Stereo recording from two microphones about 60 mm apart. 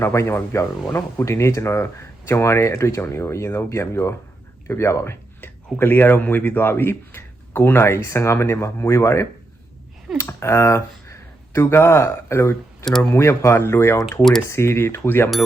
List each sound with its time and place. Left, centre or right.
0.0 s speech: left
0.5 s speech: left
5.7 s speech: left
10.2 s speech: left
14.0 s speech: centre
14.5 s speech: left